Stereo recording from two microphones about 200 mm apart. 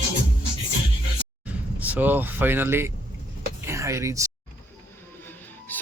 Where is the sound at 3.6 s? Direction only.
15° right (ahead or behind).